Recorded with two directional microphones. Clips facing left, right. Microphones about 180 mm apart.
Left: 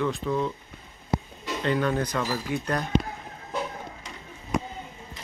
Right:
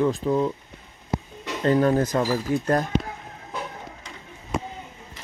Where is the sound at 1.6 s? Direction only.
40° right (ahead or behind).